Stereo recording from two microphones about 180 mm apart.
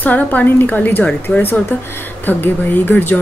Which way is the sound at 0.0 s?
10° left (ahead or behind).